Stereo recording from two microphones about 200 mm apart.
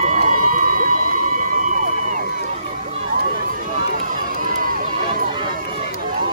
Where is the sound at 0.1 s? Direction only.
40° right (ahead or behind).